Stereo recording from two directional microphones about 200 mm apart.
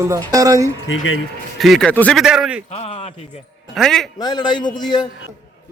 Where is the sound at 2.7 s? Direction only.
30° left (ahead or behind).